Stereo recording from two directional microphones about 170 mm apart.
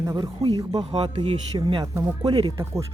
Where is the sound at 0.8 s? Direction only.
35° right (ahead or behind).